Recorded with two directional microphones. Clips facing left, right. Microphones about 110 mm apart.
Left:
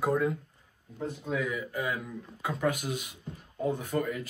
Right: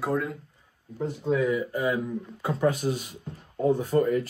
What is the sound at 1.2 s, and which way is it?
Speech, 40° right (ahead or behind).